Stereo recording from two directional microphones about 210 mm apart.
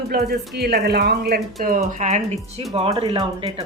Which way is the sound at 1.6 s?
40° right (ahead or behind).